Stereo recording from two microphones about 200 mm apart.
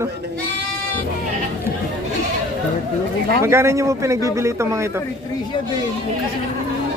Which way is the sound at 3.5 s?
15° right (ahead or behind).